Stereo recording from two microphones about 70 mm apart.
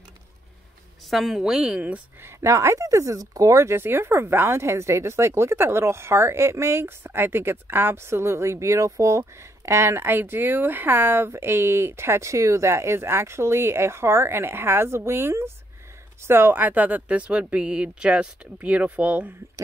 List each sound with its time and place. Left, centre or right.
1.1 s a woman's voice: centre
2.2 s speech: right